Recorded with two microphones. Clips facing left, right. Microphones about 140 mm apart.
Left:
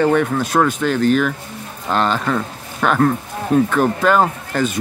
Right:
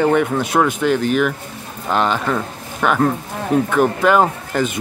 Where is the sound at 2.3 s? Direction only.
5° right (ahead or behind).